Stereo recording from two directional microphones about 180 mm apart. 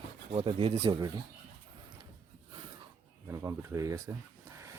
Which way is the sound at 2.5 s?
25° right (ahead or behind).